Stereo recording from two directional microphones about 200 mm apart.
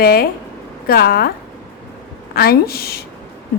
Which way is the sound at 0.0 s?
50° left (ahead or behind).